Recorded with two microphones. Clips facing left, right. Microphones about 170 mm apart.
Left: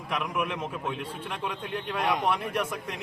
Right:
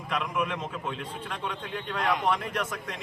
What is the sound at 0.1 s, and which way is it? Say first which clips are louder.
A man's voice: even; 10° left (ahead or behind).